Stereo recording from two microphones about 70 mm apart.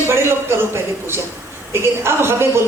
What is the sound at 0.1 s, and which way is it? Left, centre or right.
A woman's voice, right.